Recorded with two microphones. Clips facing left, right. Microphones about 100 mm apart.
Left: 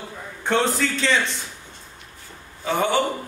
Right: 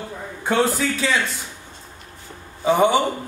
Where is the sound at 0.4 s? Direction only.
5° right (ahead or behind).